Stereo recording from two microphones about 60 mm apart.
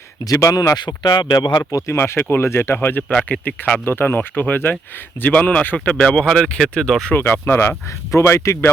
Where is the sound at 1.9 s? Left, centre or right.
Left.